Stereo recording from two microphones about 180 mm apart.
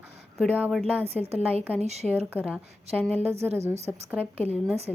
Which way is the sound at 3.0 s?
5° left (ahead or behind).